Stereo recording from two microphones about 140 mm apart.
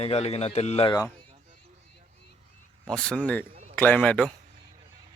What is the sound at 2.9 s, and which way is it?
Speech, 5° left (ahead or behind).